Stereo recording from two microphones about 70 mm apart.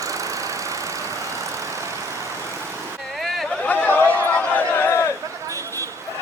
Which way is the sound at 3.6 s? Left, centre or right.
Left.